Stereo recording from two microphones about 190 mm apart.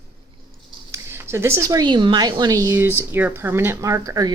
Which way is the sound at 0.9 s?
10° right (ahead or behind).